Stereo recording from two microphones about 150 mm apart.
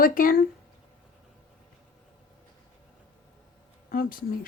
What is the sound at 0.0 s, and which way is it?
Speech, 70° left (ahead or behind).